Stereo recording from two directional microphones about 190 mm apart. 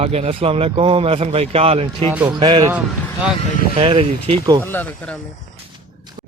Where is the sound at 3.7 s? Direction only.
30° right (ahead or behind).